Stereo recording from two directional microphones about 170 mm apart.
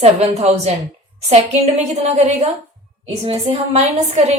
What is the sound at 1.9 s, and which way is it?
Speech, 40° right (ahead or behind).